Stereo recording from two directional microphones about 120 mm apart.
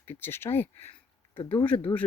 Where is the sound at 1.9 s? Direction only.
30° left (ahead or behind).